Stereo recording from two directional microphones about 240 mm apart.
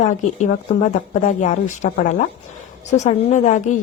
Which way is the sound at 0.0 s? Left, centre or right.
Left.